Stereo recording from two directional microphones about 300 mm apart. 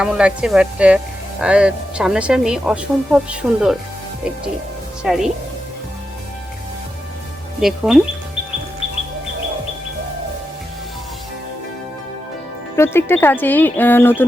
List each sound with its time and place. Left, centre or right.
0.0 s speech: centre
5.0 s speech: centre
7.6 s speech: centre
12.7 s speech: centre